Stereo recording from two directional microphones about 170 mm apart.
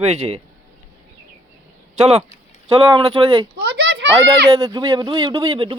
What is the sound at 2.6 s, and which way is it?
Speech, 35° right (ahead or behind).